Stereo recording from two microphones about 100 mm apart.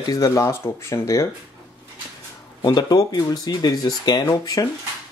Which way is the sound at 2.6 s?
45° left (ahead or behind).